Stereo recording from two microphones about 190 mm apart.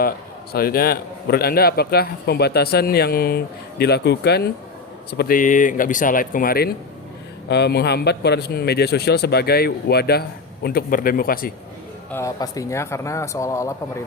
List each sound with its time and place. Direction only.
0.5 s a man's voice: 55° left (ahead or behind)
7.4 s a man's voice: 60° left (ahead or behind)
12.1 s speech: 15° left (ahead or behind)